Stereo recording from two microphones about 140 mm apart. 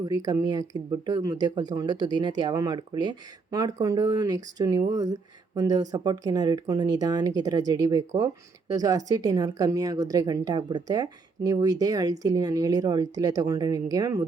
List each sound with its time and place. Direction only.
0.0 s speech: 30° right (ahead or behind)